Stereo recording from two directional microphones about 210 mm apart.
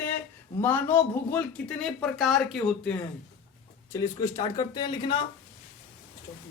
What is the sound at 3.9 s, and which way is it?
Speech, 15° left (ahead or behind).